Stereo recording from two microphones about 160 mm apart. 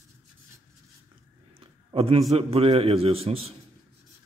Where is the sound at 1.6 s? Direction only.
35° right (ahead or behind).